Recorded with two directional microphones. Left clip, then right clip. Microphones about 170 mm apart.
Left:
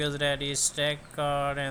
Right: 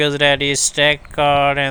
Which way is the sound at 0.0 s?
30° right (ahead or behind).